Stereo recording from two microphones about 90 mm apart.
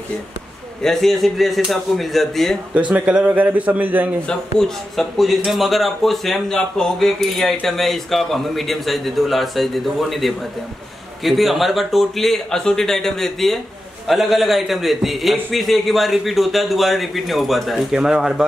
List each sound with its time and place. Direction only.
0.8 s speech: 5° left (ahead or behind)
2.9 s a man's voice: 10° right (ahead or behind)
4.3 s speech: 5° left (ahead or behind)